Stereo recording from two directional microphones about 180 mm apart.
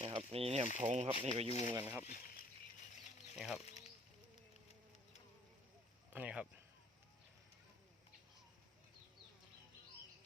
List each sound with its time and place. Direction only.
0.0 s mechanisms: 30° right (ahead or behind)
0.8 s speech: 35° right (ahead or behind)
1.5 s speech: 35° left (ahead or behind)
1.7 s speech: 10° right (ahead or behind)
2.0 s speech: 50° left (ahead or behind)
3.3 s speech: centre (ahead or behind)
6.1 s speech: 5° right (ahead or behind)